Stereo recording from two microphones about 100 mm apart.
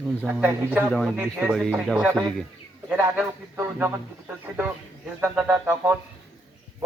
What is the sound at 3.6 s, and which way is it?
Speech, 20° right (ahead or behind).